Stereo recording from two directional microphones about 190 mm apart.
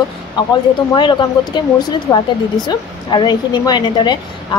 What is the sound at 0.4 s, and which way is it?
A woman's voice, 25° left (ahead or behind).